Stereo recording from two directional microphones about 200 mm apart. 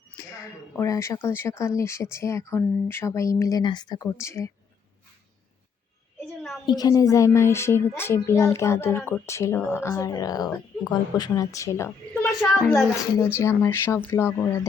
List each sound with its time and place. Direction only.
0.3 s speech: 15° left (ahead or behind)
6.2 s a sound: centre (ahead or behind)
6.7 s speech: 20° left (ahead or behind)
12.4 s a woman's voice: centre (ahead or behind)
13.1 s speech: 15° left (ahead or behind)